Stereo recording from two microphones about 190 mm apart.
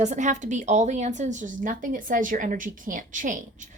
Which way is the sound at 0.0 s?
40° right (ahead or behind).